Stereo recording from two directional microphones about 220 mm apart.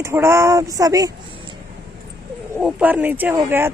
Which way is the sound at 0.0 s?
10° right (ahead or behind).